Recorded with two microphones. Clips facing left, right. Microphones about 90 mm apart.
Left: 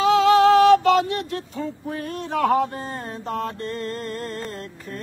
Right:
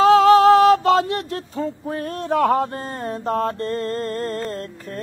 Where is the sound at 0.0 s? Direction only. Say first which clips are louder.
Right 4 dB; 35° right (ahead or behind).